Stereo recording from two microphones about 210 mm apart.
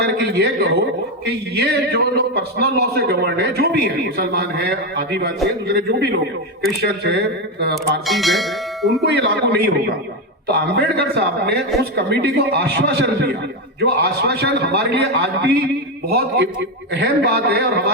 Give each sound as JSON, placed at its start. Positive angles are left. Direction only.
{"t": 0.0, "sound": "a man's voice", "side_deg": -50}
{"t": 8.0, "sound": "bell", "side_deg": 0}
{"t": 9.0, "sound": "a man's voice", "side_deg": -50}